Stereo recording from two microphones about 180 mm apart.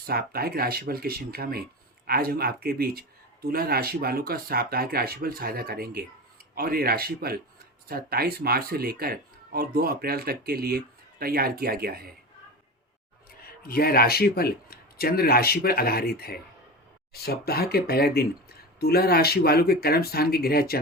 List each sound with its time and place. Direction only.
0.0 s speech: 60° right (ahead or behind)
13.6 s speech: 55° left (ahead or behind)